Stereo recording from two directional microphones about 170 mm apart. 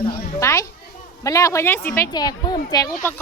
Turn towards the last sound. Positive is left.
turn(degrees=15)  # may be behind; listen again after turning